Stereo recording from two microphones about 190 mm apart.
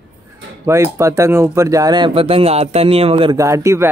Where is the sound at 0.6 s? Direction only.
15° right (ahead or behind).